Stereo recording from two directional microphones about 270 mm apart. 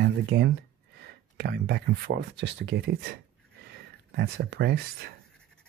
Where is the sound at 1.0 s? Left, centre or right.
Right.